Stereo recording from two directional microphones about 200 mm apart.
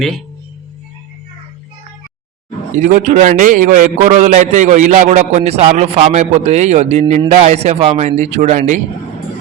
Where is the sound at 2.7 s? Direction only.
40° right (ahead or behind).